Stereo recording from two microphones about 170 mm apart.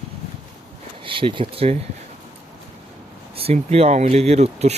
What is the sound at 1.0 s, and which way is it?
Speech, 30° right (ahead or behind).